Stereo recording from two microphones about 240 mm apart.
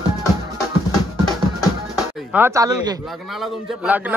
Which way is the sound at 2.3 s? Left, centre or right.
Centre.